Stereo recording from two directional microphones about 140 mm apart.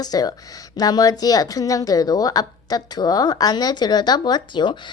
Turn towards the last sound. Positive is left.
turn(degrees=35)  # may be behind; listen again after turning